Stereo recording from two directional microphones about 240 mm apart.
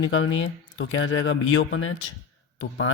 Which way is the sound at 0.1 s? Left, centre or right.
Left.